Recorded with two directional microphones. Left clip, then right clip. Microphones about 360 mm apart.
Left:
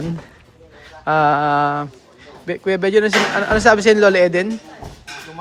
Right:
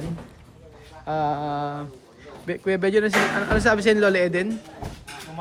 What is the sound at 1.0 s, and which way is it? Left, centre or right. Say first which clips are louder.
Mantra: left 10 dB; left.